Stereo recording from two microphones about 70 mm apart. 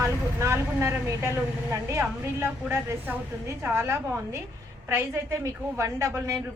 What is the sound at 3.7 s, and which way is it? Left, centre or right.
A woman's voice, right.